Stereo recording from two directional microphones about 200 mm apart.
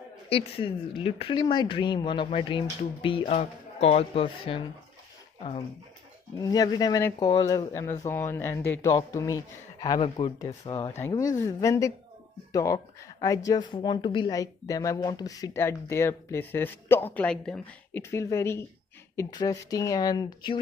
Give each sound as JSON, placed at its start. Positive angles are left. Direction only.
{"t": 0.3, "sound": "a woman's voice", "side_deg": 25}
{"t": 6.4, "sound": "a woman's voice", "side_deg": 20}